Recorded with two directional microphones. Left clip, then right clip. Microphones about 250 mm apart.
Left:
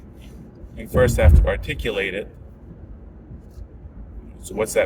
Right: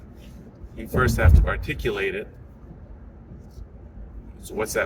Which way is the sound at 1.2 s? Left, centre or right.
Centre.